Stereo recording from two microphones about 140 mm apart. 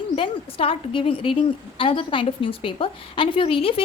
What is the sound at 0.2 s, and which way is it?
A woman's voice, 40° left (ahead or behind).